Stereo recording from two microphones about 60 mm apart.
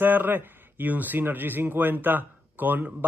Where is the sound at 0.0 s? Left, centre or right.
Right.